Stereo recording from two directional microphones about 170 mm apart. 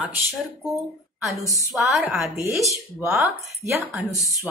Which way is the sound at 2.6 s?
20° right (ahead or behind).